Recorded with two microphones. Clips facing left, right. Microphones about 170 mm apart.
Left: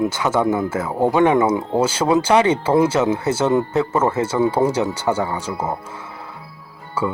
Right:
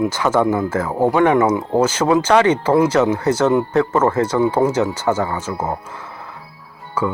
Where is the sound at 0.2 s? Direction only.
10° left (ahead or behind).